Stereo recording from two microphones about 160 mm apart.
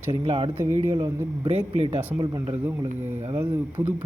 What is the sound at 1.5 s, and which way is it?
Speech, 35° right (ahead or behind).